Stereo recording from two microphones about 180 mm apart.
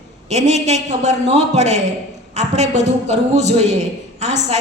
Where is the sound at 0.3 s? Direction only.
40° right (ahead or behind).